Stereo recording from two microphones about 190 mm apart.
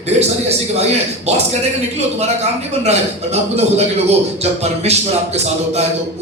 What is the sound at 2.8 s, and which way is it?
A man's voice, 35° right (ahead or behind).